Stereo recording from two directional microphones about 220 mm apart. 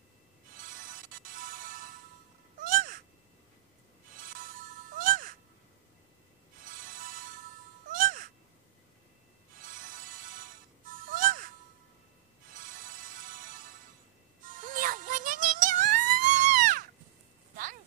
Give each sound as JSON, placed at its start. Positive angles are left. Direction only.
{"t": 0.6, "sound": "music", "side_deg": -35}
{"t": 2.6, "sound": "cat", "side_deg": -40}
{"t": 4.2, "sound": "music", "side_deg": -40}
{"t": 6.7, "sound": "music", "side_deg": -40}
{"t": 9.7, "sound": "music", "side_deg": -35}
{"t": 12.5, "sound": "music", "side_deg": -40}